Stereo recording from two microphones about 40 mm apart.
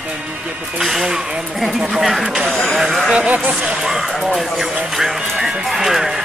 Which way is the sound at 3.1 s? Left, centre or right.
Right.